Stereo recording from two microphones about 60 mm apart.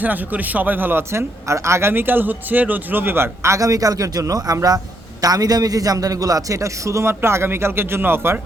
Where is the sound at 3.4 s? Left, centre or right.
Right.